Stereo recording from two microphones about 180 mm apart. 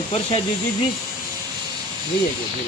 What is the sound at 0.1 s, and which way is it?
Speech, 35° left (ahead or behind).